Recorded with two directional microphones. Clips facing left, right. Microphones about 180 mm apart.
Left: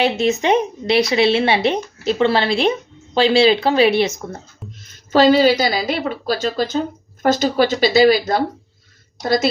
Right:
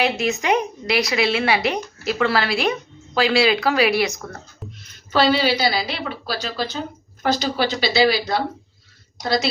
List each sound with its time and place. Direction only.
0.0 s speech: 25° left (ahead or behind)
4.8 s a woman's voice: 45° left (ahead or behind)